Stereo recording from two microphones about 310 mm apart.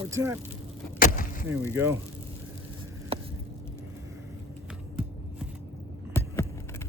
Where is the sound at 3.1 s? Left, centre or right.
Centre.